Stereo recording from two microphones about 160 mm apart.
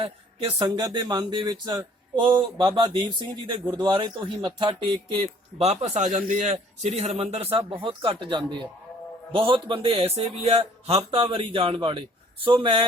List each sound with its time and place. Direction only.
0.0 s speech: 30° right (ahead or behind)
5.5 s a man's voice: 40° right (ahead or behind)